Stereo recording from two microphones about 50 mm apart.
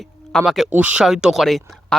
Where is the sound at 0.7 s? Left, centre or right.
Right.